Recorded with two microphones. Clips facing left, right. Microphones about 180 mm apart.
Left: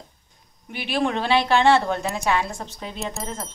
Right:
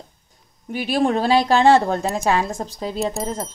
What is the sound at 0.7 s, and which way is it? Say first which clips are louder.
A woman's voice: right 5 dB; 40° right (ahead or behind).